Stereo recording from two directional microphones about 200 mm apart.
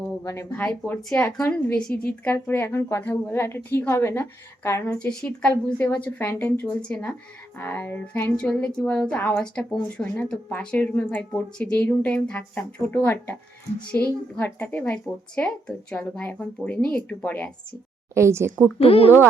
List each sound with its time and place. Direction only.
0.3 s a woman's voice: 15° left (ahead or behind)
18.1 s speech: 15° right (ahead or behind)
18.8 s speech: 30° left (ahead or behind)